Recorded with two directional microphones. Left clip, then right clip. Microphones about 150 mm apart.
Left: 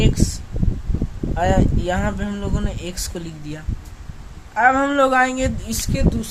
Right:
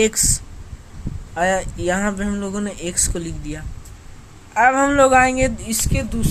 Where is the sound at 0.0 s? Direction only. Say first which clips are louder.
Right 4 dB; 40° right (ahead or behind).